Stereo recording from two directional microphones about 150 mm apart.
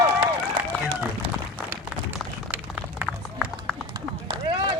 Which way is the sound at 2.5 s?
10° right (ahead or behind).